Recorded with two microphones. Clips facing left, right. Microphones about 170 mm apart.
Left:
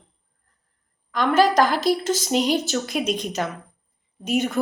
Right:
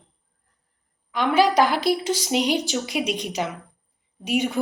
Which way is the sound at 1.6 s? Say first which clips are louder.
Left 1 dB; 45° left (ahead or behind).